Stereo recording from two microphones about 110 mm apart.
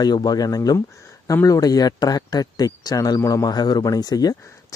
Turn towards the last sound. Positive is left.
turn(degrees=35)  # may be behind; listen again after turning